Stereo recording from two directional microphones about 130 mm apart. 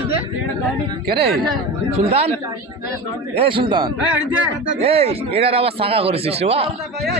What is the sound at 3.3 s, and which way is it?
Speech, 45° right (ahead or behind).